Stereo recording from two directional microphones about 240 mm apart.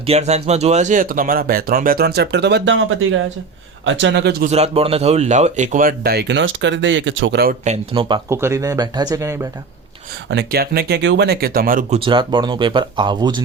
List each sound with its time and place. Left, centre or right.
0.0 s speech: right
4.5 s speech: right
10.2 s speech: right
11.9 s speech: right